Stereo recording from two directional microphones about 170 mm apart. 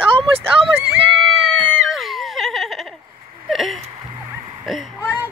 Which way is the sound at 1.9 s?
Centre (ahead or behind).